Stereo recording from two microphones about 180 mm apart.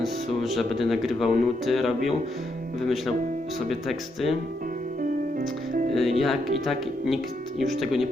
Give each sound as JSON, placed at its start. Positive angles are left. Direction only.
{"t": 0.0, "sound": "speech", "side_deg": 0}
{"t": 3.7, "sound": "speech", "side_deg": 0}
{"t": 5.4, "sound": "music", "side_deg": -45}
{"t": 5.9, "sound": "speech", "side_deg": 0}